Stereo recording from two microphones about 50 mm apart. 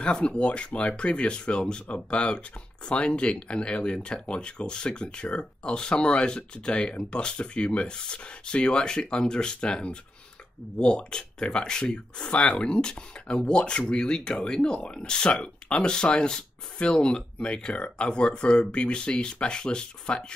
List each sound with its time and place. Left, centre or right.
0.0 s speech: centre